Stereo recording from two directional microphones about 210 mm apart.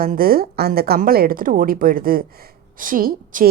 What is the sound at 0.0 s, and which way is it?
Speech, 45° right (ahead or behind).